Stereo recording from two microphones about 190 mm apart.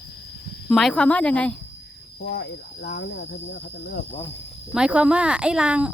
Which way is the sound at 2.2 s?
60° left (ahead or behind).